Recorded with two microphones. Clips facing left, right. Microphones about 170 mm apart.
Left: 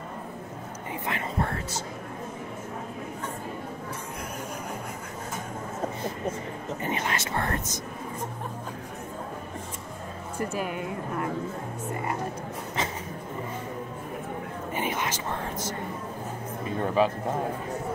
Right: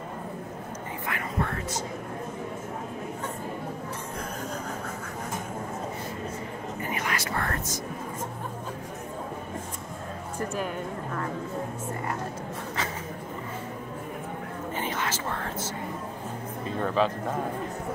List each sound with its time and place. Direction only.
1.0 s whispering: 30° left (ahead or behind)
6.8 s whispering: 25° left (ahead or behind)
14.8 s speech: 15° left (ahead or behind)
16.8 s speech: 10° left (ahead or behind)